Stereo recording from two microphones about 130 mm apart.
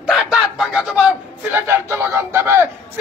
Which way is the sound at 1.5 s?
20° right (ahead or behind).